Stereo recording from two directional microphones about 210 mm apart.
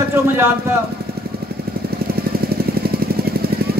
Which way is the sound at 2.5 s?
45° right (ahead or behind).